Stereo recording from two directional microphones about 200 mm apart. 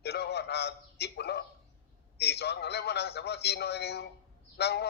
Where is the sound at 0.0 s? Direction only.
55° left (ahead or behind).